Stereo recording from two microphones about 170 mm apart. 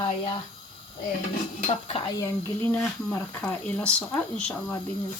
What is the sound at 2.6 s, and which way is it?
Speech, 10° left (ahead or behind).